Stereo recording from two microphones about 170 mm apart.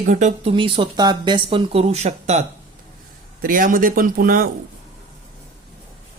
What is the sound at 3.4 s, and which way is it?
Speech, 55° right (ahead or behind).